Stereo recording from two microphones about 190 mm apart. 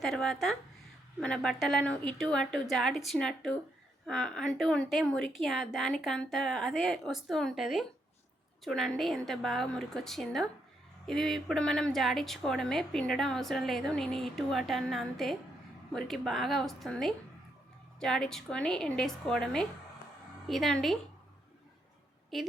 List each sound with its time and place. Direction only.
0.0 s a woman's voice: centre (ahead or behind)
22.3 s a woman's voice: centre (ahead or behind)